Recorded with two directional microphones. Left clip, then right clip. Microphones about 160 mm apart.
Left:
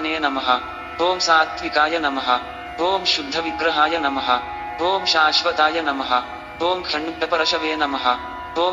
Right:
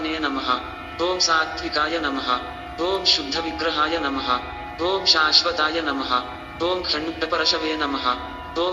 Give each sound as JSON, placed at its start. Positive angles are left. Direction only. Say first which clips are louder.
{"t": 0.0, "sound": "a man's voice", "louder": "left 4 dB", "side_deg": 25}